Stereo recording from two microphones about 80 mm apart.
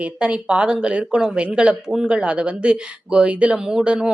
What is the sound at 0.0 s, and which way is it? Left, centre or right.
Speech, centre.